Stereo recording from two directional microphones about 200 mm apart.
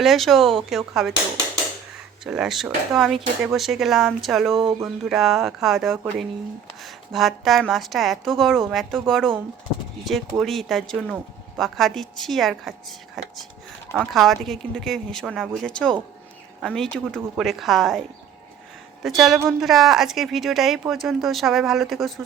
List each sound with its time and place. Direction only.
0.0 s speech: centre (ahead or behind)
2.2 s speech: 5° right (ahead or behind)
19.0 s speech: centre (ahead or behind)